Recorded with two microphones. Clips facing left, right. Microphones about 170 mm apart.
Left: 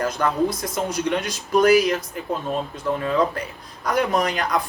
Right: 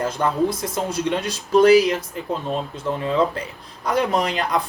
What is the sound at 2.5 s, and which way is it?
Speech, 25° right (ahead or behind).